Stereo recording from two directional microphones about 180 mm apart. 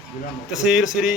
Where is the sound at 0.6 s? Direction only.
5° right (ahead or behind).